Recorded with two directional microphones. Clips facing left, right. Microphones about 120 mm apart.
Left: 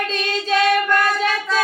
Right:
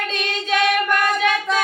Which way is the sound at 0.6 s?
20° right (ahead or behind).